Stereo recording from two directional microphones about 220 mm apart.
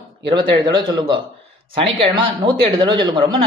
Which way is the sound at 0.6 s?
25° right (ahead or behind).